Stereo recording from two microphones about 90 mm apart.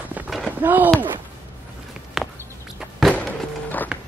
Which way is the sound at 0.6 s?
20° right (ahead or behind).